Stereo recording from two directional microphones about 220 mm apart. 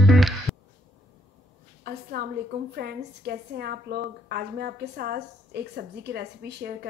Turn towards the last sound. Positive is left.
turn(degrees=-45)  # may be behind; listen again after turning